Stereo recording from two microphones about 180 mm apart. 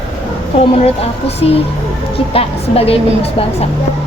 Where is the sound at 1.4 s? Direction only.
35° left (ahead or behind).